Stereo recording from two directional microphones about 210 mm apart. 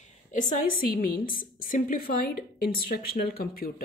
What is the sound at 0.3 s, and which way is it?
A woman's voice, 35° left (ahead or behind).